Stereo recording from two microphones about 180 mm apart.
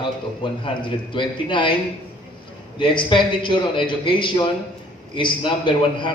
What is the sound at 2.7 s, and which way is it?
A man's voice, 25° left (ahead or behind).